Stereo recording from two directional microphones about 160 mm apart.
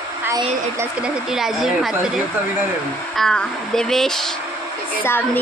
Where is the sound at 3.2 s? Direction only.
5° left (ahead or behind).